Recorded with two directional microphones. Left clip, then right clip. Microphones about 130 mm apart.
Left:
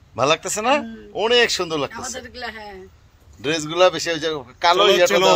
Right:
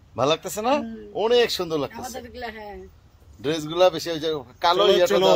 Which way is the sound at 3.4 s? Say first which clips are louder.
Left 3 dB; 20° left (ahead or behind).